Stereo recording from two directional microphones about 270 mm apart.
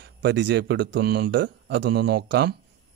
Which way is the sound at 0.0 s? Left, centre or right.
Right.